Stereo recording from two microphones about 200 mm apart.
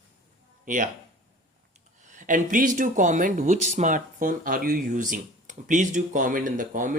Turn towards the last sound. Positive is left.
turn(degrees=-40)  # may be behind; listen again after turning